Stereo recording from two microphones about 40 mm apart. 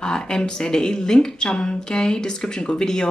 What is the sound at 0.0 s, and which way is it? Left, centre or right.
A woman's voice, centre.